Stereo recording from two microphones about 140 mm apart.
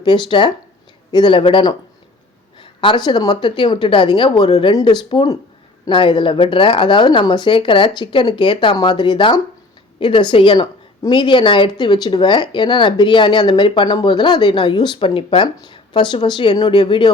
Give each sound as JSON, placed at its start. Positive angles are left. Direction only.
{"t": 0.0, "sound": "a woman's voice", "side_deg": 35}
{"t": 4.7, "sound": "a woman's voice", "side_deg": 30}